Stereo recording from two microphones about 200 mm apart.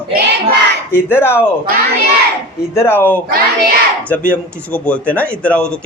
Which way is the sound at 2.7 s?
10° left (ahead or behind).